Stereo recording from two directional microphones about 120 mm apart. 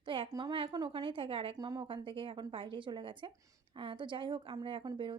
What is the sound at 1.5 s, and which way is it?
Speech, 35° right (ahead or behind).